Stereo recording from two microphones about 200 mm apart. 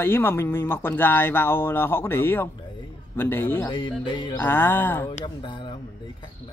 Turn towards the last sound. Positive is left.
turn(degrees=25)  # may be behind; listen again after turning